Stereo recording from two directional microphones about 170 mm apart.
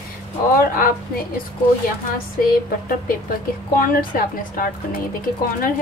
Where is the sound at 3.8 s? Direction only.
55° left (ahead or behind).